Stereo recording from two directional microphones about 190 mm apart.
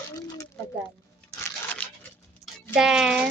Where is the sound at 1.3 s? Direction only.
15° left (ahead or behind).